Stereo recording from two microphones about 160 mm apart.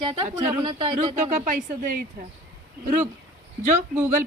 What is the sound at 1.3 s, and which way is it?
Speech, 55° right (ahead or behind).